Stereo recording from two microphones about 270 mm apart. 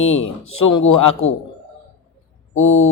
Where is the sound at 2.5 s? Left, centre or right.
Left.